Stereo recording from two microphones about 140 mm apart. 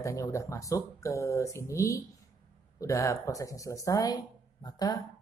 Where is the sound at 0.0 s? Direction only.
20° left (ahead or behind).